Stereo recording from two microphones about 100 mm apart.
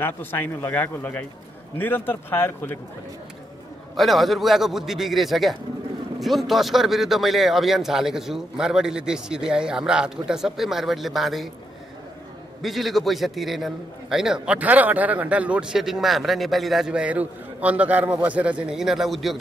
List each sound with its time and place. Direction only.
0.0 s a man's voice: 20° left (ahead or behind)
3.9 s a man's voice: centre (ahead or behind)
12.6 s a man's voice: centre (ahead or behind)